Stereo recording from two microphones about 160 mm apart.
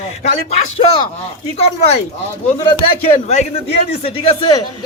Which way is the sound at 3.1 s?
45° left (ahead or behind).